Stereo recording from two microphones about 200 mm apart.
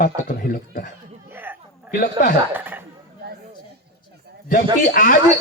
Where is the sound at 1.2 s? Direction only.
10° right (ahead or behind).